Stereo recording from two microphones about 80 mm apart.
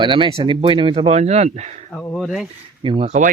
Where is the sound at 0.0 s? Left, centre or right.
Right.